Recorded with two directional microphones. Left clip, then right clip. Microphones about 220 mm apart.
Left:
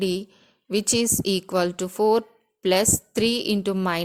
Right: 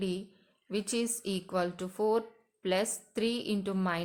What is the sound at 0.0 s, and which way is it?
A woman's voice, 40° left (ahead or behind).